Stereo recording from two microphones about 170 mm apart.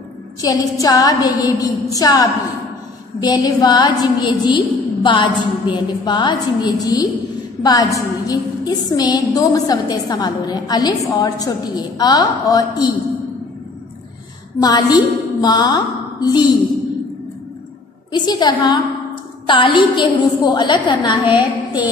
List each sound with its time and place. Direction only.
0.4 s a woman's voice: 20° left (ahead or behind)
14.6 s a woman's voice: 25° left (ahead or behind)
18.1 s a woman's voice: 25° left (ahead or behind)